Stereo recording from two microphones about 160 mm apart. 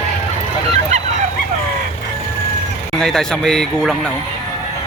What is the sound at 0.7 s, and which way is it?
Goose, 45° right (ahead or behind).